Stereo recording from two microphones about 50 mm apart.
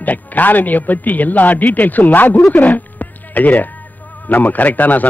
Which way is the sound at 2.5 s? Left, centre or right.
Left.